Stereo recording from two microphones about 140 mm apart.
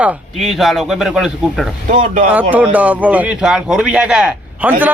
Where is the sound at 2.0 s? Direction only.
75° right (ahead or behind).